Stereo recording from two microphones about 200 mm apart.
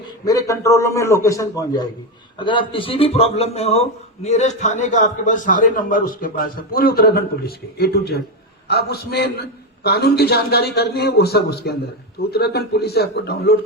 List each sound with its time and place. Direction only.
0.3 s a man's voice: 15° left (ahead or behind); by 13.6 s 55° left (ahead or behind)